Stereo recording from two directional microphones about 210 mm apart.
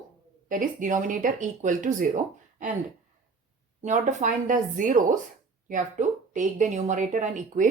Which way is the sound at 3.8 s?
35° right (ahead or behind).